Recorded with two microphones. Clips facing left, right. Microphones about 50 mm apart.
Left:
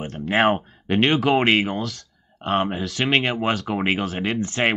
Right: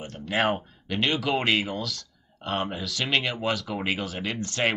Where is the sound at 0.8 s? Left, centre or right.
Left.